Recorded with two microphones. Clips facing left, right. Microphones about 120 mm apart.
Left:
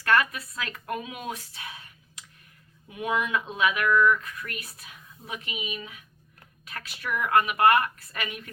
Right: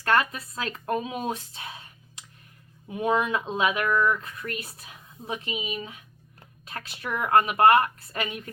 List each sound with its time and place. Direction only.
0.0 s a woman's voice: 30° right (ahead or behind)